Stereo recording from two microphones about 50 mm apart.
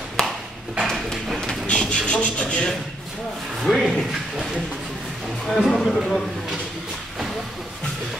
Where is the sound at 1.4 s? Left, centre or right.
Centre.